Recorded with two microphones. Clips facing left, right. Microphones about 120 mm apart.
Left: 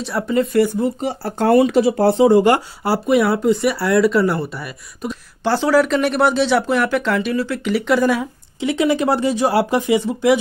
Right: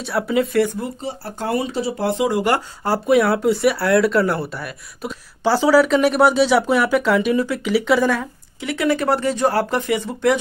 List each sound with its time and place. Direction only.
0.0 s speech: centre (ahead or behind)
1.0 s speech: 75° left (ahead or behind)
1.5 s speech: 50° left (ahead or behind)
2.0 s speech: 35° left (ahead or behind)
2.5 s speech: 10° left (ahead or behind)
8.5 s speech: 20° left (ahead or behind)